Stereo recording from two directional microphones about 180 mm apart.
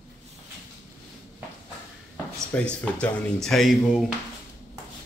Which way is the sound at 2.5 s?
5° left (ahead or behind).